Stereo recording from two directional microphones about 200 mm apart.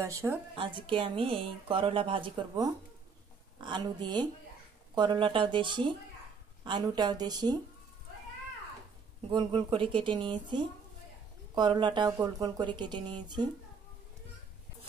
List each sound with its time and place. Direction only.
0.0 s a woman's voice: 15° right (ahead or behind)
0.6 s a woman's voice: 25° right (ahead or behind)
9.3 s a woman's voice: 25° right (ahead or behind)